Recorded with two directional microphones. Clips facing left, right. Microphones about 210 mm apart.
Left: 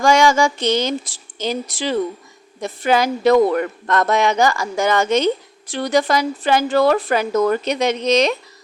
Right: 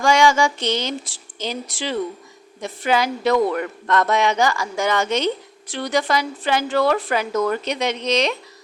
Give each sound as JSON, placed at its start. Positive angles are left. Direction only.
{"t": 0.0, "sound": "a woman's voice", "side_deg": 45}